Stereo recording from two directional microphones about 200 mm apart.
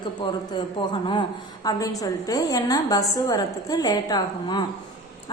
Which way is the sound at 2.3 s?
20° left (ahead or behind).